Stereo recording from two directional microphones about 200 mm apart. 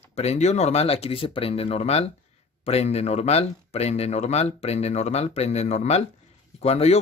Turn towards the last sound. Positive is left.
turn(degrees=30)  # may be behind; listen again after turning